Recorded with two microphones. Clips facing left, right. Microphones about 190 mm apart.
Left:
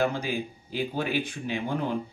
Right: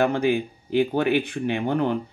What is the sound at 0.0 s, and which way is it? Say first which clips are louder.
Speech: right 7 dB; 60° right (ahead or behind).